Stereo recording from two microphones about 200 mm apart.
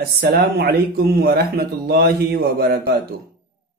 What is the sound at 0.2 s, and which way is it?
Speech, 50° right (ahead or behind).